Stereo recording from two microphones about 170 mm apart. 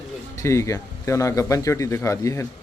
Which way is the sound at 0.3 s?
15° left (ahead or behind).